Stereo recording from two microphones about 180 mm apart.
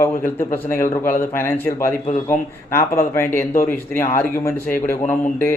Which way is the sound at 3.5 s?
50° left (ahead or behind).